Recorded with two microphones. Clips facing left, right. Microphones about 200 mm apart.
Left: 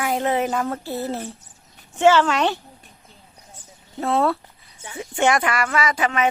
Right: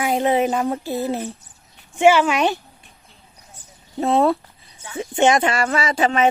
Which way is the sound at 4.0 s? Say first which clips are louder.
Right 3 dB; 20° right (ahead or behind).